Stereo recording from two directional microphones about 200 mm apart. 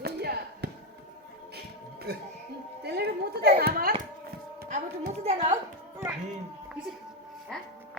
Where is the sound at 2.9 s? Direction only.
55° right (ahead or behind).